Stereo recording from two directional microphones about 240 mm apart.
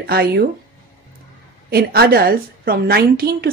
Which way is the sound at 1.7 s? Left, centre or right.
Right.